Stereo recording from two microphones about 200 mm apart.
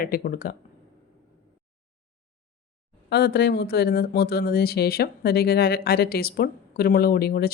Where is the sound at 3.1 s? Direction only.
55° left (ahead or behind).